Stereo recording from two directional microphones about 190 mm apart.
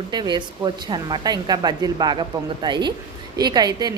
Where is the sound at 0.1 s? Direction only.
20° right (ahead or behind).